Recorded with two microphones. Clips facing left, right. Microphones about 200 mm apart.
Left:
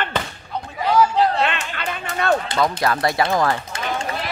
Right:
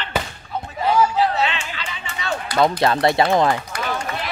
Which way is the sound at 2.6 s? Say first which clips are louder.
Right 3 dB; 25° right (ahead or behind).